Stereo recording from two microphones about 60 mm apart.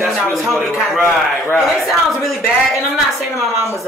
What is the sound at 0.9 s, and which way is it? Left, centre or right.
Speech, left.